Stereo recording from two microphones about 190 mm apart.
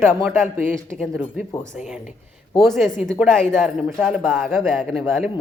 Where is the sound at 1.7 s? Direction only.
Centre (ahead or behind).